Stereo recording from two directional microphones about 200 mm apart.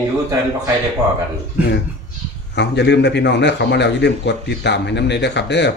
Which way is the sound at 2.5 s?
60° left (ahead or behind).